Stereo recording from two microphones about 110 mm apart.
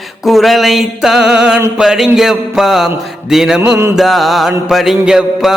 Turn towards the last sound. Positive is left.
turn(degrees=-5)  # may be behind; listen again after turning